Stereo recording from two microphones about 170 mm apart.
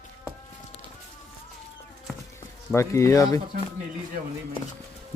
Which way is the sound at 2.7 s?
15° left (ahead or behind).